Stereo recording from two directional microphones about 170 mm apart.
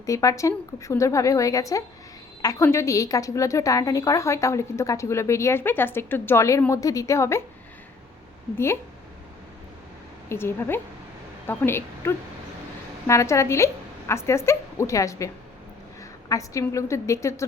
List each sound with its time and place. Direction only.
0.0 s a woman's voice: 20° left (ahead or behind)
8.5 s a woman's voice: 15° left (ahead or behind)
10.2 s a woman's voice: 15° left (ahead or behind)
16.3 s a woman's voice: 20° left (ahead or behind)